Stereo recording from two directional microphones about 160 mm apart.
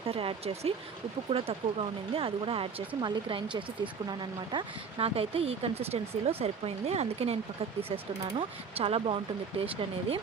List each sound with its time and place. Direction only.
0.0 s speech: 35° right (ahead or behind)
8.4 s speech: 35° right (ahead or behind)